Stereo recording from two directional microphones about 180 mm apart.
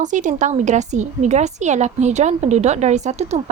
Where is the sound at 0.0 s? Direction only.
45° right (ahead or behind).